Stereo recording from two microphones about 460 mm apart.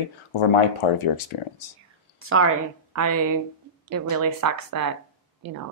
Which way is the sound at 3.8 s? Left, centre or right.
Right.